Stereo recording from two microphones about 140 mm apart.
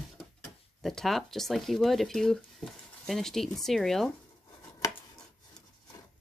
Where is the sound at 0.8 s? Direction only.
Centre (ahead or behind).